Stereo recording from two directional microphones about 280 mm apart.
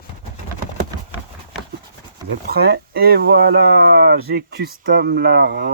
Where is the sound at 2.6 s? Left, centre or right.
Right.